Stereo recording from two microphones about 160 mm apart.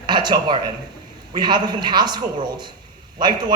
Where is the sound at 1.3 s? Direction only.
30° right (ahead or behind).